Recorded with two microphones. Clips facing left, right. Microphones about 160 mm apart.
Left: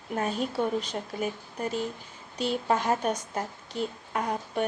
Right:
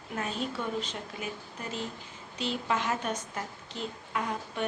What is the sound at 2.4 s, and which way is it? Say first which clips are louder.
A woman's voice: left 4 dB; 45° left (ahead or behind).